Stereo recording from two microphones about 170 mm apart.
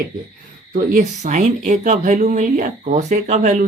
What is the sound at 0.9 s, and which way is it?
A woman's voice, 45° right (ahead or behind).